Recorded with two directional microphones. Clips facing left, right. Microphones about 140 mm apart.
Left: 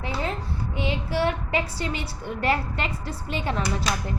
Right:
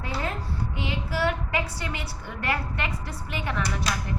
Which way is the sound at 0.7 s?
25° left (ahead or behind).